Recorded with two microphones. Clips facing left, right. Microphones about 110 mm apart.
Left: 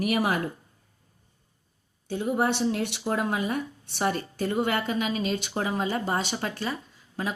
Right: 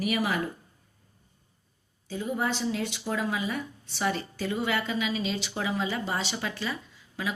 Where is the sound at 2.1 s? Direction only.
60° left (ahead or behind); by 7.3 s 45° left (ahead or behind).